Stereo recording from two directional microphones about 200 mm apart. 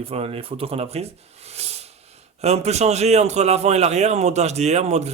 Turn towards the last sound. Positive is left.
turn(degrees=-35)  # may be behind; listen again after turning